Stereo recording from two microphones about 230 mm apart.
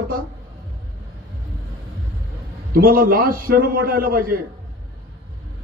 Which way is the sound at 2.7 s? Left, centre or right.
Right.